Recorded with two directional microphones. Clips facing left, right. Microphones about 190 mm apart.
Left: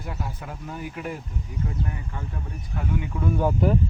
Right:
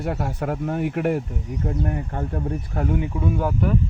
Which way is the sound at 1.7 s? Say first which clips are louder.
Right 7 dB; 55° right (ahead or behind).